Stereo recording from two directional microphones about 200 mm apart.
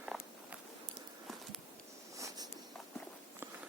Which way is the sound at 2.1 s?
15° right (ahead or behind).